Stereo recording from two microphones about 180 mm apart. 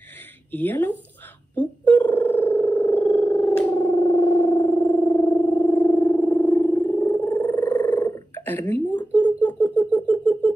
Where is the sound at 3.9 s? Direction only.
25° left (ahead or behind).